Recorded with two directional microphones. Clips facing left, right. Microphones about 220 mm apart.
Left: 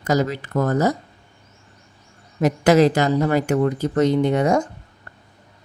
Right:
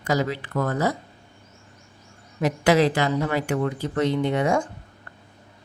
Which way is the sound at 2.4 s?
45° left (ahead or behind).